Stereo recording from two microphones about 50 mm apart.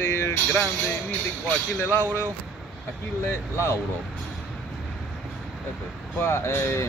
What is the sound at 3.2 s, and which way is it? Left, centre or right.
Speech, left.